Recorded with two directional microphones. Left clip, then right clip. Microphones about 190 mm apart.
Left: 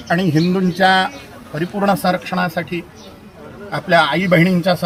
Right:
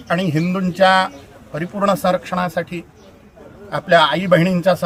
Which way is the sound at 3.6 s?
15° right (ahead or behind).